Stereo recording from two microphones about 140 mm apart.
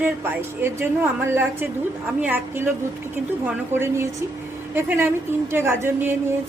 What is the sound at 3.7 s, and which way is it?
Speech, 20° right (ahead or behind).